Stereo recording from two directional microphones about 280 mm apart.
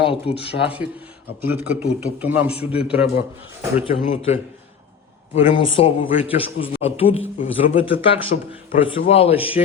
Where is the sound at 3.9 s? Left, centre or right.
Left.